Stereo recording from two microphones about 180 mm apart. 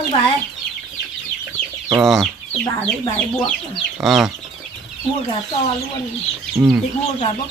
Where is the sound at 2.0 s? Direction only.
Centre (ahead or behind).